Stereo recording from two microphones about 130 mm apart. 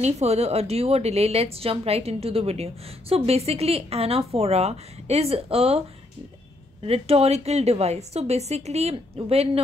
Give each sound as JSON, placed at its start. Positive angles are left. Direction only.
{"t": 0.0, "sound": "a woman's voice", "side_deg": -55}
{"t": 6.8, "sound": "a woman's voice", "side_deg": -50}